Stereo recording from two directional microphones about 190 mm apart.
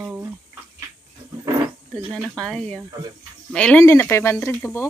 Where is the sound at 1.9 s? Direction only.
Centre (ahead or behind).